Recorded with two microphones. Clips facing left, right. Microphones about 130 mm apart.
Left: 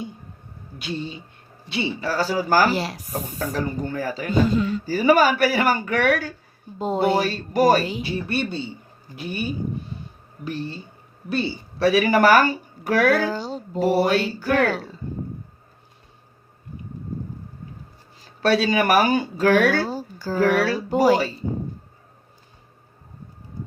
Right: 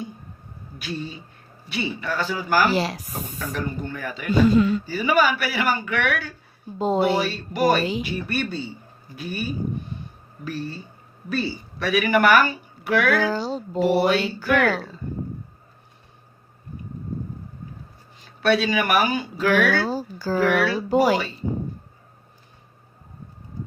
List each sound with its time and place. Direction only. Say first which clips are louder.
0.8 s a woman's voice: left 2 dB; 25° left (ahead or behind)
2.7 s speech: right 3 dB; 90° right
3.1 s a woman's voice: left 4 dB; 35° left (ahead or behind)
6.7 s speech: right 3 dB; 90° right
7.0 s speech: left 1 dB; 45° left (ahead or behind)
8.0 s speech: left 2 dB; 25° left (ahead or behind)
11.3 s a woman's voice: left 1 dB; 25° left (ahead or behind)
13.1 s speech: right 1 dB; 85° right
13.7 s a woman's voice: even; 45° left (ahead or behind)
18.4 s a woman's voice: left 2 dB; 35° left (ahead or behind)
19.9 s a sound: right 3 dB; 90° right
20.4 s a woman's voice: left 2 dB; 40° left (ahead or behind)